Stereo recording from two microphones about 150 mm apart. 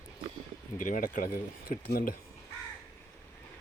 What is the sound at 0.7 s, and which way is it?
Speech, 65° left (ahead or behind).